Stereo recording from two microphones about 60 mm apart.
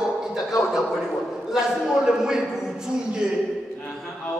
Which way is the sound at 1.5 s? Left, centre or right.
Centre.